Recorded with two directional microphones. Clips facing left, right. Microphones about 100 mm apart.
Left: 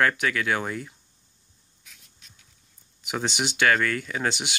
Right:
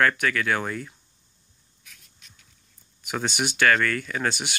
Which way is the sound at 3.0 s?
15° left (ahead or behind).